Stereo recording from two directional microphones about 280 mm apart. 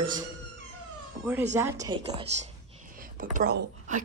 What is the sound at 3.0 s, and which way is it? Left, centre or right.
A woman's voice, right.